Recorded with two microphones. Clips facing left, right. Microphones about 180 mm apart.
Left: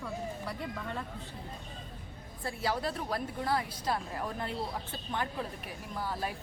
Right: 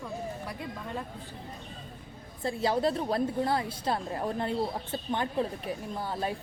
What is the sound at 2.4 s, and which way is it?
A woman's voice, 25° right (ahead or behind).